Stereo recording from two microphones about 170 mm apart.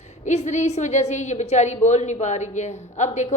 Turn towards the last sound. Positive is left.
turn(degrees=45)  # may be behind; listen again after turning